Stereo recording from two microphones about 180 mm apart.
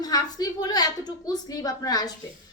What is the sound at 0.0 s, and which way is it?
A woman's voice, 20° left (ahead or behind).